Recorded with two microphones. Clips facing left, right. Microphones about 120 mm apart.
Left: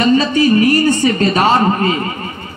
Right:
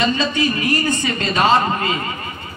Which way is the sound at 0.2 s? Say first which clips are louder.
Left 8 dB; 35° left (ahead or behind).